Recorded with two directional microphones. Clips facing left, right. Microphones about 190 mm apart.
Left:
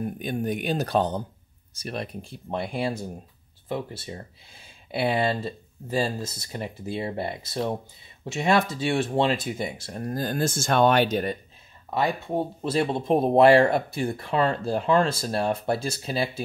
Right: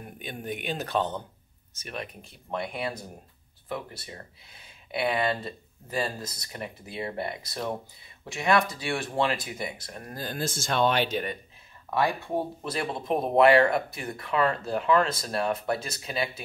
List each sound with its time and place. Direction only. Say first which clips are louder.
0.2 s speech: left 4 dB; 40° left (ahead or behind)
10.2 s speech: left 4 dB; 50° left (ahead or behind)
11.9 s speech: left 1 dB; 25° left (ahead or behind)